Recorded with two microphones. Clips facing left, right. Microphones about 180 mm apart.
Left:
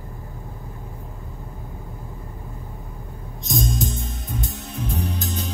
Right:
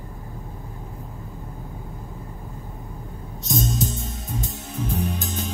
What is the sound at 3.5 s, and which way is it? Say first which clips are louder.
Music: even; centre (ahead or behind).